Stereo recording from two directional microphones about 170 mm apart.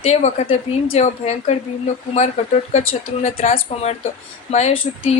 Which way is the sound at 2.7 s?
40° left (ahead or behind).